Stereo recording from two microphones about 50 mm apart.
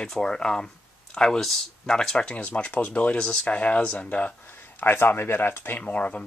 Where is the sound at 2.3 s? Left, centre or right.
Left.